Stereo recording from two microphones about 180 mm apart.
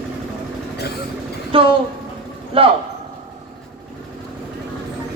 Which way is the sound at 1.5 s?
30° right (ahead or behind).